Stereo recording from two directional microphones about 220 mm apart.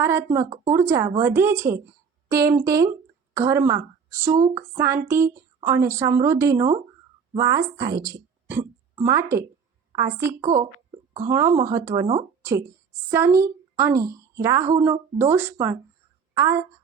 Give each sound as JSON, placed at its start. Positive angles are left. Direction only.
{"t": 0.0, "sound": "a woman's voice", "side_deg": -10}